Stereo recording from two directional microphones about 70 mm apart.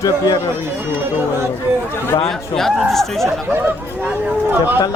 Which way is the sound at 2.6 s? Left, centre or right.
Centre.